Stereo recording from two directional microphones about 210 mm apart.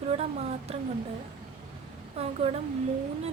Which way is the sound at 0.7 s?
30° right (ahead or behind).